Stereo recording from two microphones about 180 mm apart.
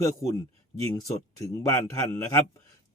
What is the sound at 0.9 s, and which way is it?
Speech, 20° left (ahead or behind).